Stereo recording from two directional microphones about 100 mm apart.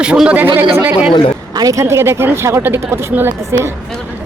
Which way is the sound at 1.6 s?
35° right (ahead or behind).